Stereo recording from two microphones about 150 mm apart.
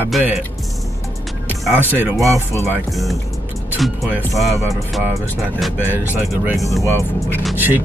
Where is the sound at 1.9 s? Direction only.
15° right (ahead or behind).